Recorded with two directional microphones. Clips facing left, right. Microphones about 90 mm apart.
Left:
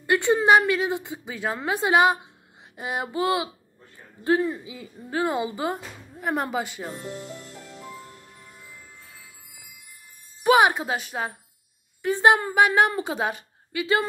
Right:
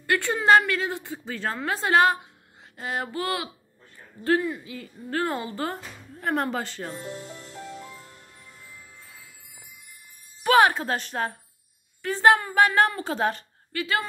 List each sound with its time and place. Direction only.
0.0 s a woman's voice: 20° left (ahead or behind)
10.4 s a woman's voice: 15° left (ahead or behind)